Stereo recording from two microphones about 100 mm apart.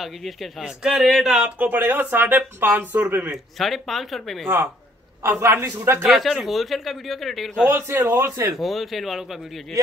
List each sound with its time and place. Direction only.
0.0 s a man's voice: centre (ahead or behind); by 3.3 s 20° right (ahead or behind)
3.5 s a man's voice: centre (ahead or behind)
5.2 s a man's voice: 25° right (ahead or behind)
6.0 s a man's voice: centre (ahead or behind)
7.6 s a man's voice: 20° right (ahead or behind)
8.5 s a man's voice: centre (ahead or behind)